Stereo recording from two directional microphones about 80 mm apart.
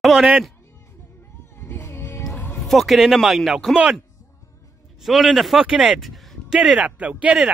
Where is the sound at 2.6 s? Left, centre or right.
Centre.